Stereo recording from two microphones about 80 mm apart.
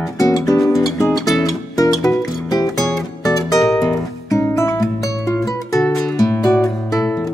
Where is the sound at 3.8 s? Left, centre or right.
Left.